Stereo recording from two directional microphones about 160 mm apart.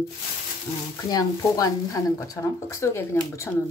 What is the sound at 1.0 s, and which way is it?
Speech, 25° left (ahead or behind).